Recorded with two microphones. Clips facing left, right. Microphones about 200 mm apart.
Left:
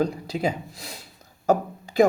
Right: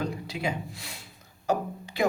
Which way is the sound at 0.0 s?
35° left (ahead or behind).